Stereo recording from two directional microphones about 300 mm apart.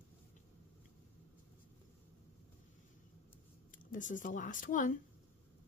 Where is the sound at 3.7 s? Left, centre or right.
Left.